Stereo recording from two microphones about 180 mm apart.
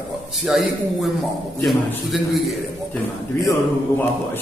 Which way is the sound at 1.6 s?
Centre (ahead or behind).